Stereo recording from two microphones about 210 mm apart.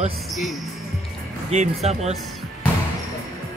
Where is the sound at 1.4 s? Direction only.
30° right (ahead or behind).